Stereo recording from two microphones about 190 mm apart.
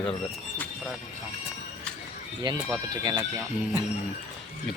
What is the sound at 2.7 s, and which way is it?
Speech, 20° right (ahead or behind).